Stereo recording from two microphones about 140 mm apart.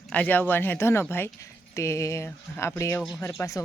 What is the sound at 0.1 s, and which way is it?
Speech, 10° left (ahead or behind).